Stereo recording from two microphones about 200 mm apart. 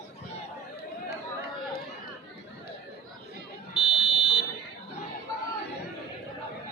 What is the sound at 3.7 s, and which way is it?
Fire alarm, 25° left (ahead or behind).